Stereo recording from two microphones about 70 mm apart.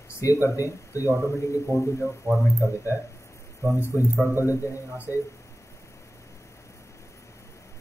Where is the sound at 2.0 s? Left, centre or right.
Right.